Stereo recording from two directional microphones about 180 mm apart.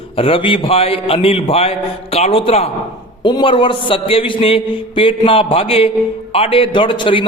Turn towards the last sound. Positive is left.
turn(degrees=25)  # may be behind; listen again after turning